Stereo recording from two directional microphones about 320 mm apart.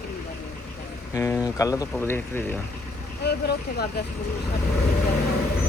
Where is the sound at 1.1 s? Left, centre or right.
Centre.